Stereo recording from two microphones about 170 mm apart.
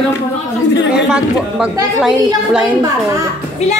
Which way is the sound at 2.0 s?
5° right (ahead or behind).